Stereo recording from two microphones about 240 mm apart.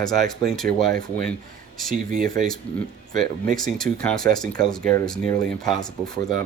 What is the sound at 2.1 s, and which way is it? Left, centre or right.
Speech, right.